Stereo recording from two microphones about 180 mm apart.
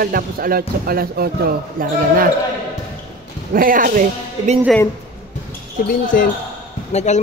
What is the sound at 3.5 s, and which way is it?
Speech, 50° right (ahead or behind).